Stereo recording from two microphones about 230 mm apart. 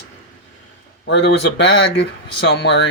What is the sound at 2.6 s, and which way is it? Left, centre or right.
Speech, left.